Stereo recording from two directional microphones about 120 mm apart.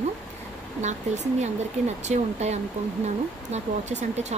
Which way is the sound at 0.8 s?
75° right (ahead or behind).